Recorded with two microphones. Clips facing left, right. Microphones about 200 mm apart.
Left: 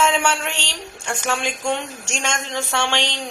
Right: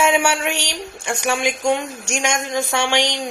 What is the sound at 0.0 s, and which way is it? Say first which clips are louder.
A woman's voice: right 2 dB; 10° right (ahead or behind).